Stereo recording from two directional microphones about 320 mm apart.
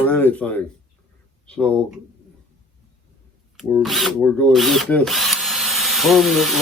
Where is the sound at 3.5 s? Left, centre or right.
Centre.